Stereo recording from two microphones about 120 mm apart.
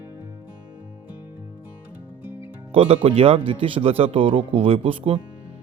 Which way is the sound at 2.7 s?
50° right (ahead or behind).